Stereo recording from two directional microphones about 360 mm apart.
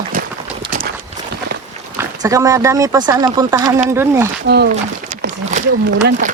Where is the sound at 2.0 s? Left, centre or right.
Centre.